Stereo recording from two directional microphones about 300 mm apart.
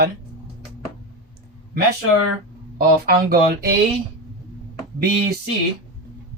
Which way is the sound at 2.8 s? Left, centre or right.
Right.